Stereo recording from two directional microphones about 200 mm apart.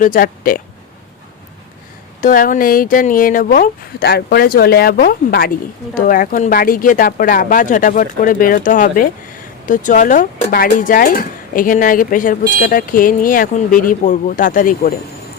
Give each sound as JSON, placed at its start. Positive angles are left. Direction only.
{"t": 0.0, "sound": "speech", "side_deg": 45}
{"t": 2.2, "sound": "speech", "side_deg": 40}